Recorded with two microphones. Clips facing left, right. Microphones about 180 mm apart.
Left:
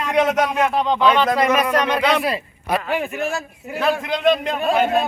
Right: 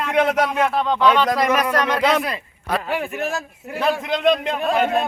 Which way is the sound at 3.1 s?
Centre (ahead or behind).